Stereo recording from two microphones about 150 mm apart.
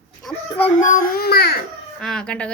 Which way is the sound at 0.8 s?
65° left (ahead or behind).